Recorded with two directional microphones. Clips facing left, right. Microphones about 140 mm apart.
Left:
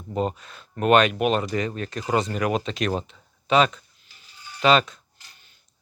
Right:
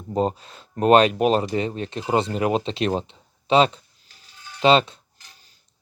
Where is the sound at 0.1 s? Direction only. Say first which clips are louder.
Right 3 dB; 30° right (ahead or behind).